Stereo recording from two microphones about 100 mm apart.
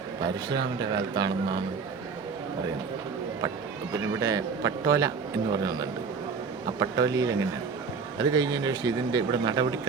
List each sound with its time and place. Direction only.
0.5 s speech: 45° right (ahead or behind)
4.2 s a man's voice: 35° right (ahead or behind)
6.7 s a man's voice: 40° right (ahead or behind)